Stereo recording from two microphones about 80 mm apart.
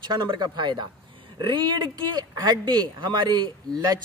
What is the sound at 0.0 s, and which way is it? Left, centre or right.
Speech, right.